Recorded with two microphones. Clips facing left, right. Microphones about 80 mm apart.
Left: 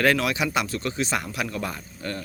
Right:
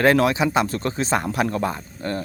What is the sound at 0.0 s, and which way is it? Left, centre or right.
Speech, right.